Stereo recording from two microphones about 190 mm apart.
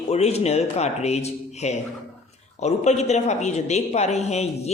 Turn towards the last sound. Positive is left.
turn(degrees=35)  # may be behind; listen again after turning